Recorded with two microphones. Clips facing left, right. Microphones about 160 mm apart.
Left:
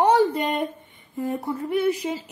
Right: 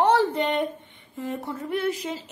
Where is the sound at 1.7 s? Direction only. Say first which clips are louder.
Left 4 dB; 10° left (ahead or behind).